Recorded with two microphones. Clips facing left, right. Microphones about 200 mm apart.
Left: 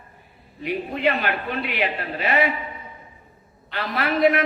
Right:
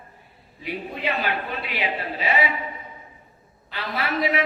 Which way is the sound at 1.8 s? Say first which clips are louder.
Left 2 dB; 55° left (ahead or behind).